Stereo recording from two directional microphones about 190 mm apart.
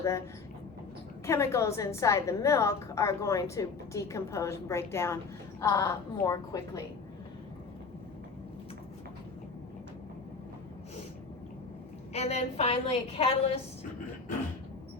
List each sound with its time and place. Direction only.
1.3 s a woman's voice: 15° left (ahead or behind)
12.1 s a woman's voice: 35° left (ahead or behind)